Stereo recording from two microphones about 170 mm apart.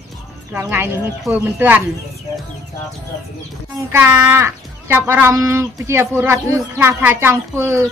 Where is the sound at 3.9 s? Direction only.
10° right (ahead or behind).